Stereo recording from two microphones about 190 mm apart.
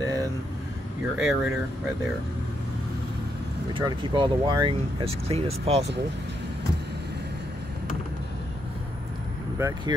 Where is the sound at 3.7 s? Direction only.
25° right (ahead or behind).